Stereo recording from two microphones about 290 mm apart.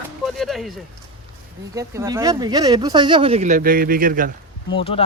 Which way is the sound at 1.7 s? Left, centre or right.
Centre.